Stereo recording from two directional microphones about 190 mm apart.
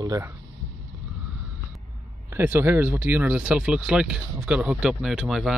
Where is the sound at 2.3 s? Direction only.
10° right (ahead or behind).